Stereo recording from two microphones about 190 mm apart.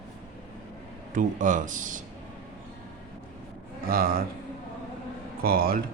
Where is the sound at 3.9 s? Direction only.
50° right (ahead or behind).